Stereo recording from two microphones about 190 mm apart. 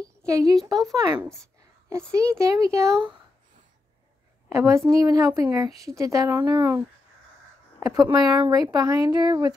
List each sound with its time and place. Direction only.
0.3 s a woman's voice: 20° right (ahead or behind)
1.1 s a woman's voice: 5° right (ahead or behind)
4.5 s a woman's voice: 15° right (ahead or behind)
7.8 s speech: 15° right (ahead or behind)